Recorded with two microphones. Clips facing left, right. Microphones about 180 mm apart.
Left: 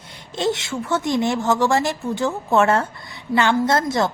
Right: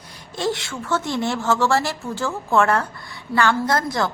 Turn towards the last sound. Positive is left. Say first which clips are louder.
# left 3 dB
turn(degrees=25)  # may be behind; listen again after turning